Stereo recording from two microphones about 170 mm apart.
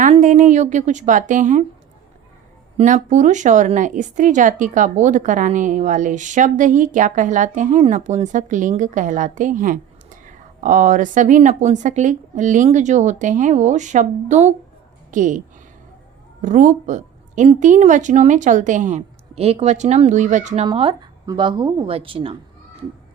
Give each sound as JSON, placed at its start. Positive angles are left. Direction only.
{"t": 0.2, "sound": "speech", "side_deg": -50}
{"t": 2.7, "sound": "speech", "side_deg": -45}
{"t": 16.4, "sound": "speech", "side_deg": -45}
{"t": 20.7, "sound": "speech", "side_deg": -30}